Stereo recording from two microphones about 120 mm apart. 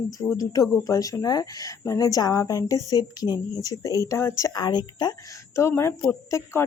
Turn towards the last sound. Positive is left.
turn(degrees=25)  # may be behind; listen again after turning